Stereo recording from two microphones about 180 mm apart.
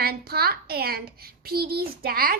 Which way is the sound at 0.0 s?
60° right (ahead or behind).